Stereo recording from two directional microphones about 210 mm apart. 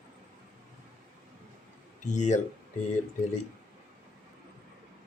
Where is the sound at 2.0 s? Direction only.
35° left (ahead or behind).